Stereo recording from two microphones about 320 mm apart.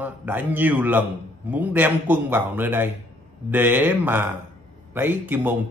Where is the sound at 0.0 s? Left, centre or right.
Centre.